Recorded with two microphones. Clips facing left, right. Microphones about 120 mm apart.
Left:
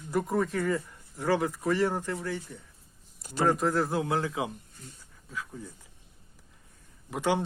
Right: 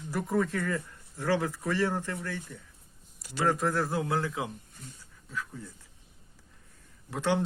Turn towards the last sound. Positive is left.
turn(degrees=15)  # may be behind; listen again after turning